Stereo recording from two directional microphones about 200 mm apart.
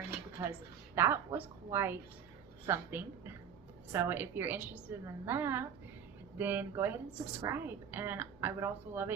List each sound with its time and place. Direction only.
0.4 s a woman's voice: 10° right (ahead or behind)